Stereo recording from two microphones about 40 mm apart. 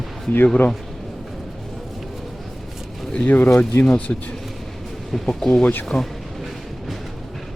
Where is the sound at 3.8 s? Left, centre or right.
Left.